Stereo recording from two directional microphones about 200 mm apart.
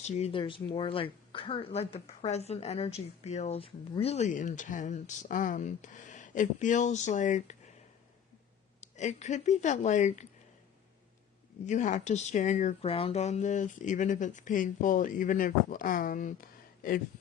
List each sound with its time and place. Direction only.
0.0 s speech: 35° left (ahead or behind)
8.8 s speech: 35° left (ahead or behind)
11.6 s speech: 40° left (ahead or behind)